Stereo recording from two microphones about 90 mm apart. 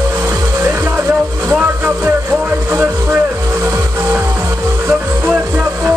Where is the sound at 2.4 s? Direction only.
25° right (ahead or behind).